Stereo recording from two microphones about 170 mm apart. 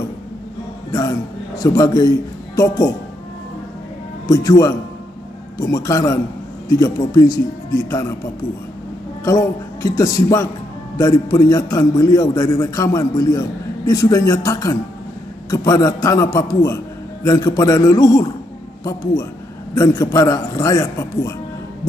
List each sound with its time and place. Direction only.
1.6 s a man's voice: 20° left (ahead or behind)
4.3 s a man's voice: 20° left (ahead or behind)
9.2 s a man's voice: 20° left (ahead or behind)
19.7 s a man's voice: 20° left (ahead or behind)